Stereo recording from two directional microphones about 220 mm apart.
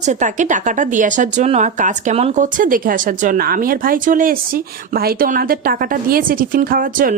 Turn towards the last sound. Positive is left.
turn(degrees=-40)  # may be behind; listen again after turning